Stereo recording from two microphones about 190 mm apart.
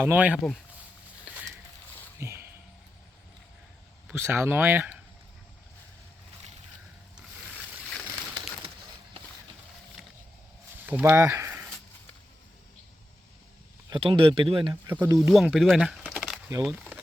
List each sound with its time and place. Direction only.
0.0 s speech: 10° right (ahead or behind)
1.2 s a sound: 10° right (ahead or behind)
4.1 s speech: 10° right (ahead or behind)
11.0 s speech: 15° right (ahead or behind)
13.9 s speech: 25° right (ahead or behind)
15.3 s speech: centre (ahead or behind)
16.6 s a sound: 5° right (ahead or behind)